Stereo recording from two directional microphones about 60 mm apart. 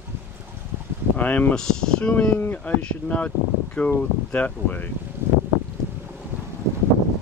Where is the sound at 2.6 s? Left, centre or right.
Left.